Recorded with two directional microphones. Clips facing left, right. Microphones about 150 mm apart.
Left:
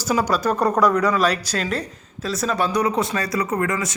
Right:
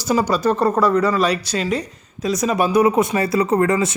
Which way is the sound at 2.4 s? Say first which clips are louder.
Right 5 dB; 15° right (ahead or behind).